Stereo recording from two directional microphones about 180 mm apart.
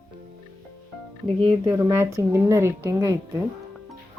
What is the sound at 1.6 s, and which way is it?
Speech, 15° right (ahead or behind).